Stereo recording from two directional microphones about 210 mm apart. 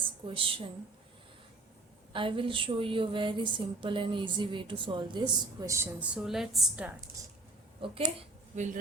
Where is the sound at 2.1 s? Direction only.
25° right (ahead or behind); by 7.0 s 5° right (ahead or behind).